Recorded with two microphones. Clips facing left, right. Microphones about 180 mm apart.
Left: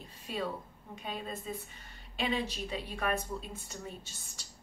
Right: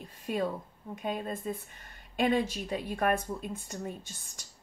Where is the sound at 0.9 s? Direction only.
50° right (ahead or behind).